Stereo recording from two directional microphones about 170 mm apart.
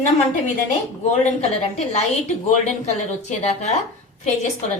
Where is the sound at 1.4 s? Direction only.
40° left (ahead or behind).